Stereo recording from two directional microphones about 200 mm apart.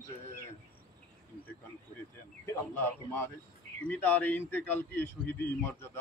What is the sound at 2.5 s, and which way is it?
A man's voice, 10° left (ahead or behind).